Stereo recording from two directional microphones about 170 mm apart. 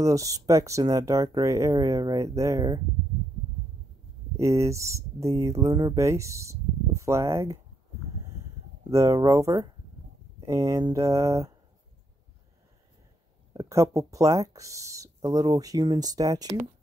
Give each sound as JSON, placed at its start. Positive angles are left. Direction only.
{"t": 0.0, "sound": "speech", "side_deg": -20}
{"t": 4.4, "sound": "speech", "side_deg": -15}
{"t": 8.9, "sound": "speech", "side_deg": -20}
{"t": 13.5, "sound": "speech", "side_deg": -20}